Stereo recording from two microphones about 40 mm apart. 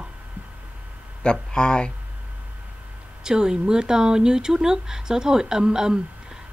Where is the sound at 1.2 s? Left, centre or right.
Left.